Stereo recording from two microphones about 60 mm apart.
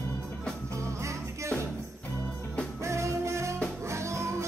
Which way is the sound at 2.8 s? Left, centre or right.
Right.